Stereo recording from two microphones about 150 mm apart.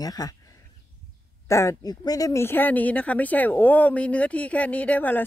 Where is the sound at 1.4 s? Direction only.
20° left (ahead or behind).